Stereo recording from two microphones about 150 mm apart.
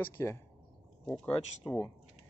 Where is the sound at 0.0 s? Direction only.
20° left (ahead or behind).